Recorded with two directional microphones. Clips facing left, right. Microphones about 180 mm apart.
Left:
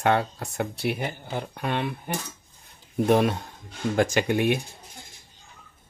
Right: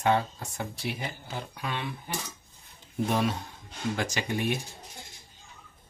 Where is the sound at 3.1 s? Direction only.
55° left (ahead or behind).